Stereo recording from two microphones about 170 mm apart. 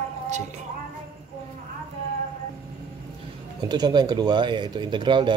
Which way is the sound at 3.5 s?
25° right (ahead or behind).